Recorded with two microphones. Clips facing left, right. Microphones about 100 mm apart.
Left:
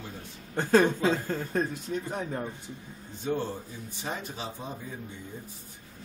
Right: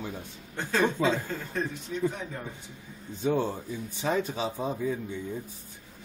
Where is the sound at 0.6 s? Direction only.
45° left (ahead or behind).